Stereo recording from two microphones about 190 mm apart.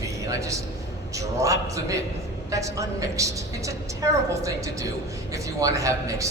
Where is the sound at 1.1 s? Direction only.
15° right (ahead or behind).